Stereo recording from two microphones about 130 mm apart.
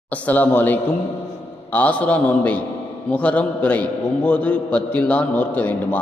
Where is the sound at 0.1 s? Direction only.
15° left (ahead or behind).